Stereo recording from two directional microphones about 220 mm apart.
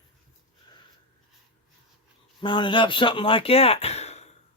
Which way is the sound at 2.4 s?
20° left (ahead or behind).